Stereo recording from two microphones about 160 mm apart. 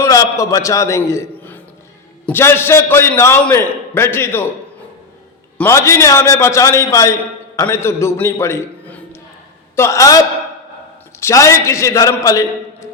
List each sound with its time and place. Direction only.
0.0 s a man's voice: 20° left (ahead or behind)
5.5 s a man's voice: 15° left (ahead or behind)